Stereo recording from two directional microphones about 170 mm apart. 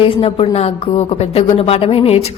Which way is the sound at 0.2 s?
35° left (ahead or behind).